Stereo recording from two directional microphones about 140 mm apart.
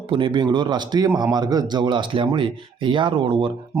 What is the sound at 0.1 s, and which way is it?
Speech, 35° right (ahead or behind).